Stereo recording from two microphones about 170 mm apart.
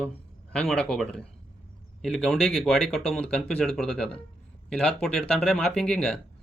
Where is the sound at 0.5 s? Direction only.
5° left (ahead or behind).